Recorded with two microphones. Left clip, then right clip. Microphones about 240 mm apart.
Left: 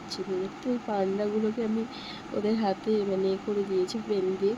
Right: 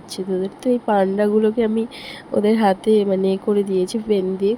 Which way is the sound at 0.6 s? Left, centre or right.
Right.